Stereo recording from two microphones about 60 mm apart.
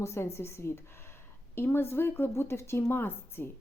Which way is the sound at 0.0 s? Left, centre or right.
Left.